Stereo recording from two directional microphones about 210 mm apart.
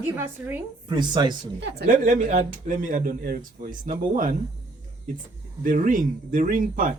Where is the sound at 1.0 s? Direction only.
20° right (ahead or behind).